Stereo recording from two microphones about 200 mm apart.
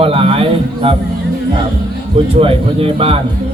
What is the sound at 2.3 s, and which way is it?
Speech, 30° right (ahead or behind).